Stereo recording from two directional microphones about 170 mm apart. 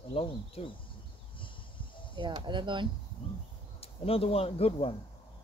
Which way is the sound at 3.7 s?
35° left (ahead or behind).